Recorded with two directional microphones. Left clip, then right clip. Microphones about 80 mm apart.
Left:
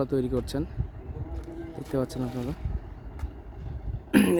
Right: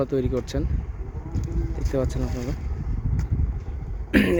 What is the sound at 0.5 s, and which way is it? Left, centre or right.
Speech, centre.